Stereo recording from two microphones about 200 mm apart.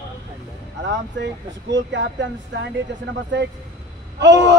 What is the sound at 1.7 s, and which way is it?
Speech, 60° right (ahead or behind).